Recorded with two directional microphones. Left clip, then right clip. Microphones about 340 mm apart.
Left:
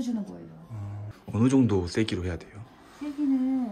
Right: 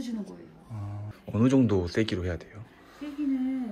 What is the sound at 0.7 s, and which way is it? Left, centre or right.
Speech, centre.